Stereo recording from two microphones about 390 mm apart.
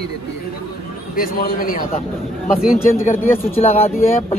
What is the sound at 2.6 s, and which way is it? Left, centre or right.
Speech, centre.